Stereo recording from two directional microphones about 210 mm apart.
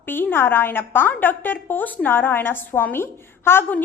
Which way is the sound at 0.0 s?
10° left (ahead or behind).